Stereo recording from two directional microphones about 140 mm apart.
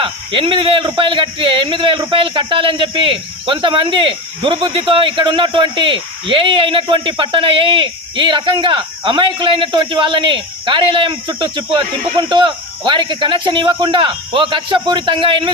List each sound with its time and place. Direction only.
0.0 s speech: 35° right (ahead or behind)